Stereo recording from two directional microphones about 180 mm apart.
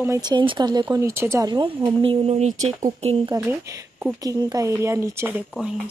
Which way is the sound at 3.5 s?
15° right (ahead or behind).